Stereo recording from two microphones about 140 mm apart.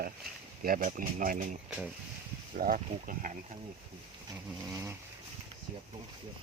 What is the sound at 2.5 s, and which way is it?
Speech, 80° right.